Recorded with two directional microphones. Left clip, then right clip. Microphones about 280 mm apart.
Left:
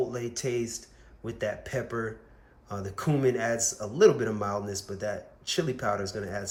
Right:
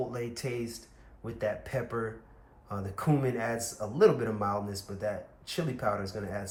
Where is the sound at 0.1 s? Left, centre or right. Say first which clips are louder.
Left 4 dB; centre.